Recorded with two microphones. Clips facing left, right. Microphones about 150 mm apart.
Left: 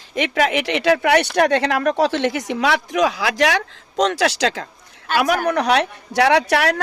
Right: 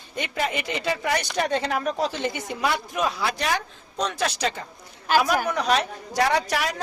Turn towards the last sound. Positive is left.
turn(degrees=70)  # may be behind; listen again after turning